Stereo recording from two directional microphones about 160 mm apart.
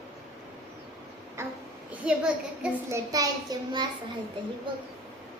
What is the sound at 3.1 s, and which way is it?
Child singing, 25° right (ahead or behind).